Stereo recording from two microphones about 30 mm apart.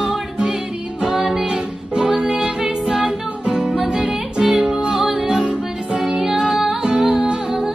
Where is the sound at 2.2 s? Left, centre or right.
Right.